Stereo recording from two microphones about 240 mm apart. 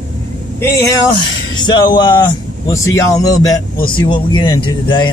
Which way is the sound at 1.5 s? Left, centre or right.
Centre.